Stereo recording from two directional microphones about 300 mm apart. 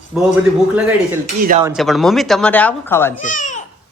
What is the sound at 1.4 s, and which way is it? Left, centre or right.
Cutlery, right.